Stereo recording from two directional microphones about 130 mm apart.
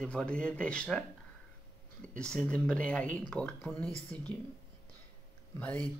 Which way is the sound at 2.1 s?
5° left (ahead or behind).